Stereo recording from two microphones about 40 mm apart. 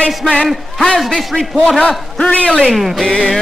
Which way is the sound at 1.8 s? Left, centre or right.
Left.